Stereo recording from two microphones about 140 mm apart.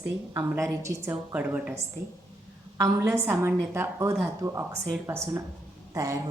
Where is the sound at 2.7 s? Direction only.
20° right (ahead or behind).